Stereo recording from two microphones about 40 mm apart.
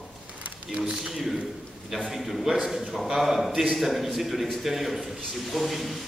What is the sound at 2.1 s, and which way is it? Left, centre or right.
A man's voice, centre.